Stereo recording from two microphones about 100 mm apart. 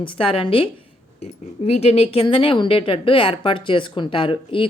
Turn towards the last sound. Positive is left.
turn(degrees=60)  # may be behind; listen again after turning